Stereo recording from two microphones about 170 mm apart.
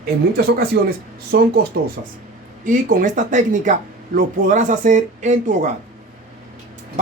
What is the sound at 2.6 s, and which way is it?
Speech, 50° right (ahead or behind).